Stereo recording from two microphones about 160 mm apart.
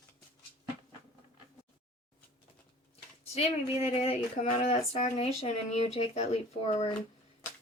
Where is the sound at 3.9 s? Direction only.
40° left (ahead or behind).